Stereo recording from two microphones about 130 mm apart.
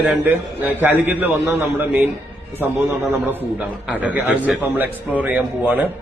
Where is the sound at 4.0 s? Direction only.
10° right (ahead or behind).